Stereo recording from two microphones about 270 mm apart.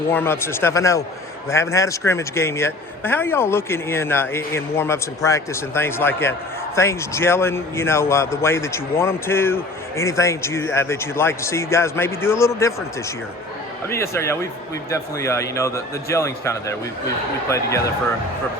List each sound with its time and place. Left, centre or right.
0.1 s a man's voice: centre
13.9 s a man's voice: centre